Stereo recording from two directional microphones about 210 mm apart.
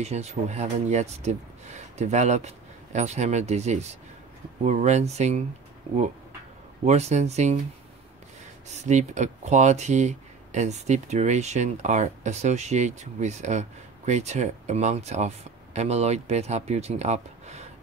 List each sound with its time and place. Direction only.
0.0 s speech: 30° right (ahead or behind)
6.9 s speech: 30° right (ahead or behind)
8.7 s speech: 35° right (ahead or behind)